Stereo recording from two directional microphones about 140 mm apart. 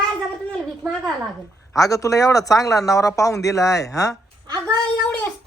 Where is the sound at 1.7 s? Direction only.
25° left (ahead or behind).